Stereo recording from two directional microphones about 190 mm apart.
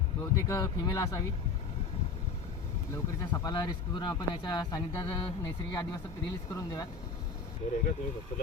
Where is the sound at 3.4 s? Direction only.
20° left (ahead or behind).